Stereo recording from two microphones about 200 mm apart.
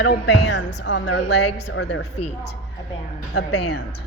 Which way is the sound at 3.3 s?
55° left (ahead or behind).